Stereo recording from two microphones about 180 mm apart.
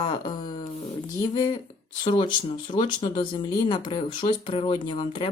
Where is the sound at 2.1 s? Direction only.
25° left (ahead or behind).